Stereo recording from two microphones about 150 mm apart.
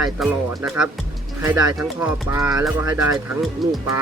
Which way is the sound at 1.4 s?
15° right (ahead or behind).